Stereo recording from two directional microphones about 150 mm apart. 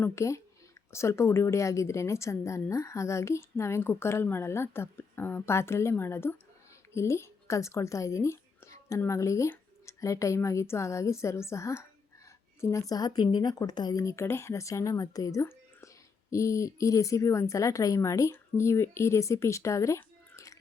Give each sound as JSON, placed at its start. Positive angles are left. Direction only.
{"t": 0.0, "sound": "a woman's voice", "side_deg": 20}